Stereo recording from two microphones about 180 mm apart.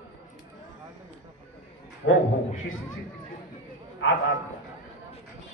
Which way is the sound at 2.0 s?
90° left.